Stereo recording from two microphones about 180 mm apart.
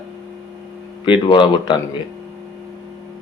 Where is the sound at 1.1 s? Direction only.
25° left (ahead or behind).